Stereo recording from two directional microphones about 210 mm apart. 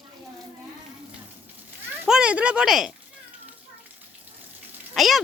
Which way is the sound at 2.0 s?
5° right (ahead or behind).